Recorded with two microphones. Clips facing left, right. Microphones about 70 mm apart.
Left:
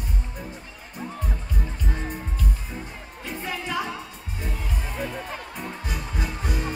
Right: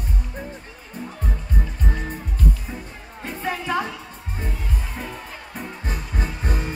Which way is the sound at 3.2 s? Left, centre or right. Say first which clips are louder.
Right 5 dB; right.